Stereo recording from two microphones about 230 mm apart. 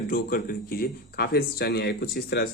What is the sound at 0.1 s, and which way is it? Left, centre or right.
Speech, left.